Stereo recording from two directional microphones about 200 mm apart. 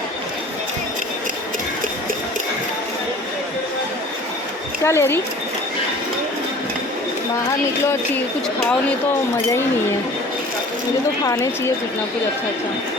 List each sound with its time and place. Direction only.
4.8 s speech: 15° left (ahead or behind)
11.3 s speech: 15° left (ahead or behind)